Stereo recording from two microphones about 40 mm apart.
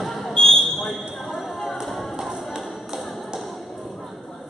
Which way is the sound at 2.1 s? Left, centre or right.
Centre.